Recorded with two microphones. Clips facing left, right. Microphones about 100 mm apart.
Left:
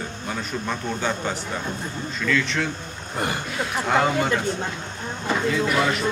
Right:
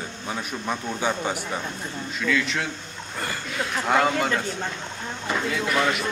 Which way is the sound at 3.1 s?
20° left (ahead or behind).